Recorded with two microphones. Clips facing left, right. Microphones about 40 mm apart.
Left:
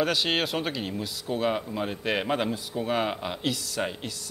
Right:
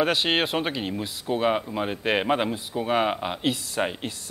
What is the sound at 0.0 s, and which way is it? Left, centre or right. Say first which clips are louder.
A man's voice: right 3 dB; right.